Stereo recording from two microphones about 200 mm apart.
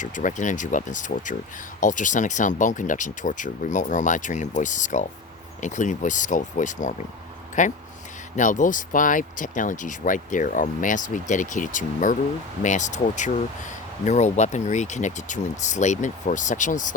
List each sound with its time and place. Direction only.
0.0 s speech: 40° left (ahead or behind)